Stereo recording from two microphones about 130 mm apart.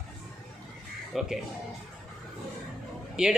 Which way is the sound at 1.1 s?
Centre (ahead or behind).